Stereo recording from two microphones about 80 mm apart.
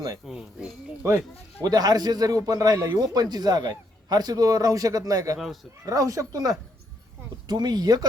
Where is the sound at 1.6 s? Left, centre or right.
Right.